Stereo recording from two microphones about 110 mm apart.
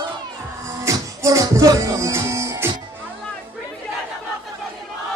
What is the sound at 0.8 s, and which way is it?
Music, 30° right (ahead or behind).